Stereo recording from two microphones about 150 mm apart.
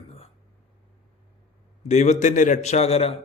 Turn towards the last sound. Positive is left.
turn(degrees=45)  # may be behind; listen again after turning